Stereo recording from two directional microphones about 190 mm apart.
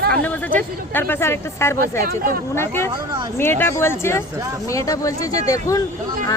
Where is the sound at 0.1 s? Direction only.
10° left (ahead or behind).